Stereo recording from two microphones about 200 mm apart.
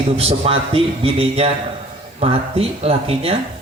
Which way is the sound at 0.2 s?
30° right (ahead or behind).